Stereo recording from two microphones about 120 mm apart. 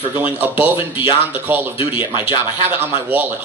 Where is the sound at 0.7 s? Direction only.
45° left (ahead or behind).